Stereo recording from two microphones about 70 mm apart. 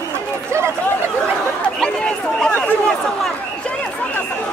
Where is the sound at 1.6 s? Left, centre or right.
Centre.